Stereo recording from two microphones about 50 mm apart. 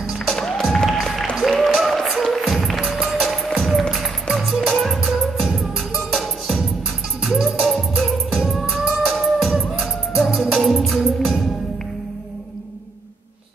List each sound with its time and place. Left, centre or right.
0.3 s music: centre
1.6 s a sound: centre
2.3 s music: centre
6.1 s music: centre